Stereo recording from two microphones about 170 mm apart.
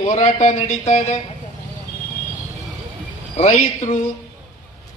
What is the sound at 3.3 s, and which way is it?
Speech, 40° left (ahead or behind).